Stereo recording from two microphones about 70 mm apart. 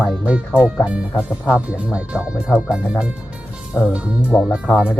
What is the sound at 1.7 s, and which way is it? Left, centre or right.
Speech, centre.